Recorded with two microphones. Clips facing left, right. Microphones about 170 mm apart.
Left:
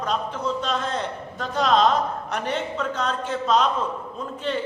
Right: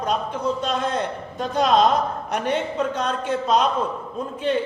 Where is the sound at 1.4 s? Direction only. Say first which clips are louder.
Right 2 dB; 15° right (ahead or behind).